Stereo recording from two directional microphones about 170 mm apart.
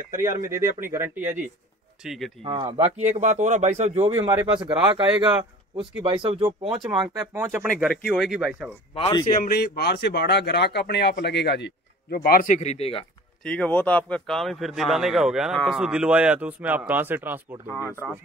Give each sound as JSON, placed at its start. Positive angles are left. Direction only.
{"t": 0.1, "sound": "speech", "side_deg": -15}
{"t": 2.0, "sound": "a man's voice", "side_deg": 0}
{"t": 2.4, "sound": "speech", "side_deg": -30}
{"t": 4.3, "sound": "speech", "side_deg": -15}
{"t": 7.3, "sound": "speech", "side_deg": -15}
{"t": 7.8, "sound": "a man's voice", "side_deg": 0}
{"t": 8.9, "sound": "a man's voice", "side_deg": 35}
{"t": 9.4, "sound": "speech", "side_deg": 65}
{"t": 13.4, "sound": "a man's voice", "side_deg": 5}